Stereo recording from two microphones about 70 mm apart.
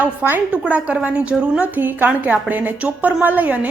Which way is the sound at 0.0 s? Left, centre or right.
Right.